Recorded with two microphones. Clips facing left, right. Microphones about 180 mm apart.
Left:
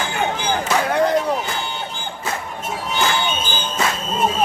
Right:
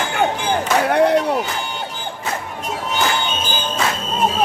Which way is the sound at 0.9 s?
65° right (ahead or behind).